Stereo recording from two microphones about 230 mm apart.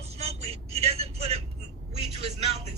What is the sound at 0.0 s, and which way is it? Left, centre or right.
Vehicle, right.